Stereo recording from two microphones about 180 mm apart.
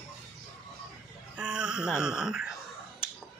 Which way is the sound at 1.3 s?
5° right (ahead or behind).